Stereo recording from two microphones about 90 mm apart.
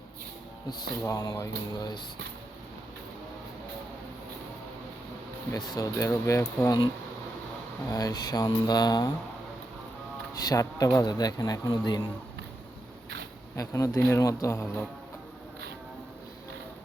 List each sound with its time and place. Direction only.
0.7 s a man's voice: 45° left (ahead or behind)
5.7 s a man's voice: 40° left (ahead or behind)
7.9 s a man's voice: 40° left (ahead or behind)
10.3 s a man's voice: 40° left (ahead or behind)
13.6 s a man's voice: 35° left (ahead or behind)